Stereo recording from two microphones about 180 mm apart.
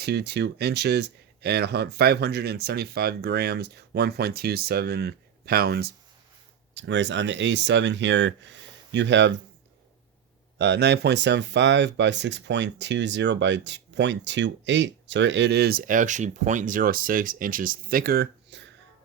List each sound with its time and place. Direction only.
0.0 s speech: 65° right (ahead or behind)
6.7 s speech: 85° right
10.6 s speech: 70° right (ahead or behind)